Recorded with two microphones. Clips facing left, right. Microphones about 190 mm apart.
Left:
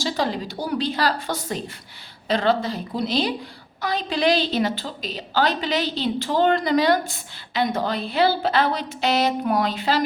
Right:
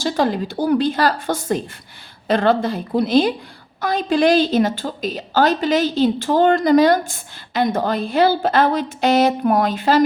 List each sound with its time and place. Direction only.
0.0 s a woman's voice: 50° right (ahead or behind)